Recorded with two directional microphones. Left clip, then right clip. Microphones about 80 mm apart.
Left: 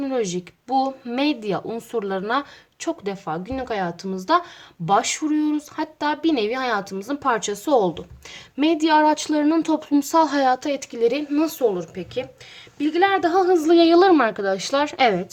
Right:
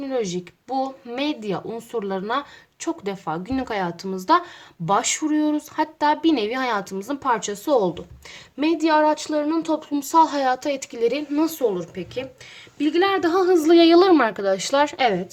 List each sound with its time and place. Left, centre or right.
0.0 s speech: left
3.0 s speech: centre
3.4 s a woman's voice: centre
4.9 s speech: centre
7.2 s a woman's voice: left
9.0 s a woman's voice: left; by 12.3 s centre
12.8 s speech: centre